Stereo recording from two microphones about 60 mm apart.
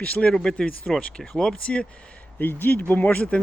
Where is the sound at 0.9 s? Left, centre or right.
Centre.